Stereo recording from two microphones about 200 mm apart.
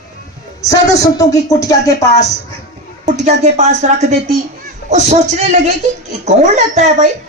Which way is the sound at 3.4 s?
35° right (ahead or behind).